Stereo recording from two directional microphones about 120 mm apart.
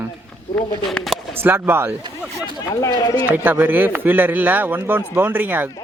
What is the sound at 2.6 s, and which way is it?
Speech, 30° left (ahead or behind).